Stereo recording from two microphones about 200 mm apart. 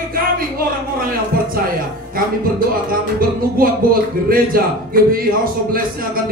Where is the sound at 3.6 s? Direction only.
45° right (ahead or behind).